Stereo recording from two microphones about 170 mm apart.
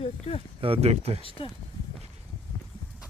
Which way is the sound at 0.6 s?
35° right (ahead or behind).